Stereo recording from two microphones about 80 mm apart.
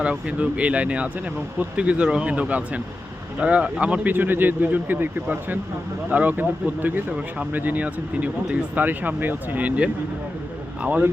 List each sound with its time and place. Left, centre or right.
0.0 s speech: centre